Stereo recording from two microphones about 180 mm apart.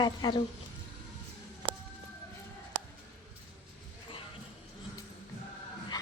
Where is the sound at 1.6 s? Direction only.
30° right (ahead or behind).